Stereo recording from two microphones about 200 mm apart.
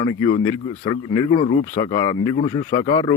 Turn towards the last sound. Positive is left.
turn(degrees=20)  # may be behind; listen again after turning